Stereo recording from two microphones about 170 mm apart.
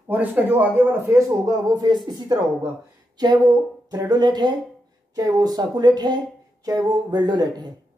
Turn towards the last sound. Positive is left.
turn(degrees=-25)  # may be behind; listen again after turning